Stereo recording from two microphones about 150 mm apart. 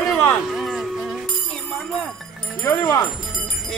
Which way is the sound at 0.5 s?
Centre (ahead or behind).